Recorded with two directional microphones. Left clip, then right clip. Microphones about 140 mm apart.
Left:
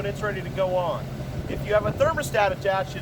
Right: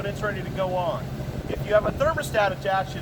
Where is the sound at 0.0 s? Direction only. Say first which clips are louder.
Even; 30° left (ahead or behind).